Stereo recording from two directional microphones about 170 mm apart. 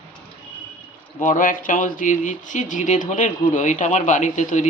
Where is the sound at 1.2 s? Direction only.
50° left (ahead or behind).